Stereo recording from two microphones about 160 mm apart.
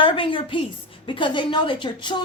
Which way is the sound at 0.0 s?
30° left (ahead or behind).